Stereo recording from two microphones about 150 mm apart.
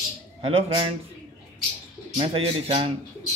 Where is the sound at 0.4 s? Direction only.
40° right (ahead or behind).